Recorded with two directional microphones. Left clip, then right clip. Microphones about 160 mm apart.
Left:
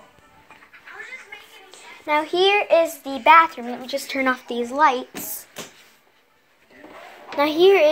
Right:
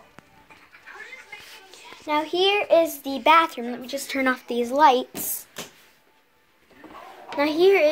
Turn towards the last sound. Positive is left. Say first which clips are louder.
# left 3 dB
turn(degrees=0)  # may be behind; listen again after turning